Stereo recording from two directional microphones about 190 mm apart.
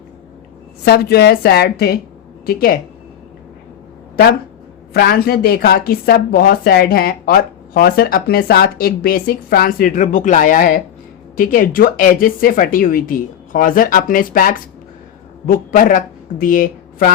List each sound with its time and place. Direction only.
0.9 s a woman's voice: 55° left (ahead or behind)
4.9 s a woman's voice: 55° left (ahead or behind)